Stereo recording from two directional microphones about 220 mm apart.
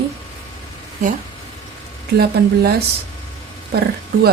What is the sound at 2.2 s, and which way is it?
Speech, 45° right (ahead or behind).